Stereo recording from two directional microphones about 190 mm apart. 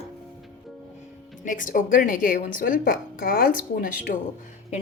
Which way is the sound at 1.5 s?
45° left (ahead or behind).